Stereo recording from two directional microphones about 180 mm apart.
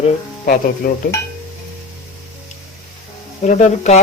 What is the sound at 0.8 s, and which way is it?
Speech, 50° left (ahead or behind).